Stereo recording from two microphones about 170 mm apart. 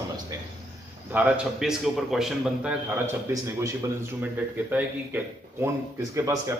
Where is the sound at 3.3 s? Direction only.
20° right (ahead or behind).